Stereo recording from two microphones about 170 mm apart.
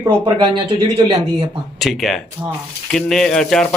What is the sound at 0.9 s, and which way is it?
Speech, 30° right (ahead or behind).